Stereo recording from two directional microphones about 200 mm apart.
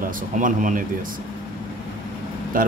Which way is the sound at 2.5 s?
45° right (ahead or behind).